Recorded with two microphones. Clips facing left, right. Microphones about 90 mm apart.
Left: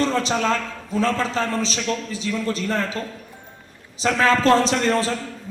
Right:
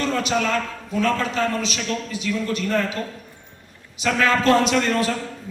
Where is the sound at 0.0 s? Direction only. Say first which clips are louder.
Left 1 dB; 30° left (ahead or behind).